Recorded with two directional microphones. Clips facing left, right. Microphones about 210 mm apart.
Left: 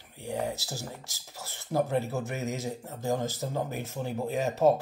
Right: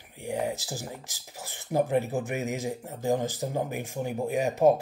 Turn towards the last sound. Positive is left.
turn(degrees=-15)  # may be behind; listen again after turning